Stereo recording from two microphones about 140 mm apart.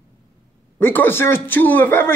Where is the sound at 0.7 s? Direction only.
15° left (ahead or behind).